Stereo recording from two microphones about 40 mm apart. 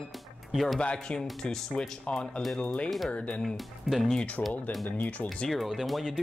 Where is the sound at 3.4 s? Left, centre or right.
Centre.